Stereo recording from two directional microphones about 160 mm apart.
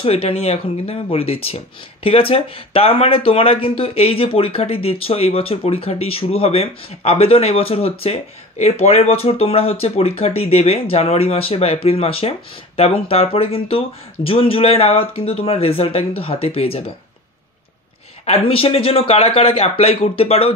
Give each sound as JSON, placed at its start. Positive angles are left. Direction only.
{"t": 0.0, "sound": "speech", "side_deg": 35}
{"t": 18.2, "sound": "speech", "side_deg": 40}